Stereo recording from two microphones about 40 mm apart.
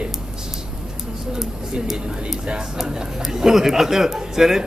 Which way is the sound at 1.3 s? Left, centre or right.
Centre.